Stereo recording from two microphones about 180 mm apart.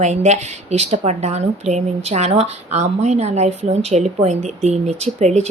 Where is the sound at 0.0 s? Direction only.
40° right (ahead or behind).